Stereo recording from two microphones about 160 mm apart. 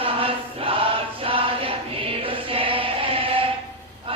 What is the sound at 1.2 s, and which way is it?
Chant, 35° right (ahead or behind).